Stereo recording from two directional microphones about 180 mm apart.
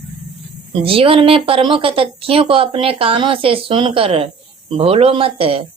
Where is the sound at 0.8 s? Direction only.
30° right (ahead or behind).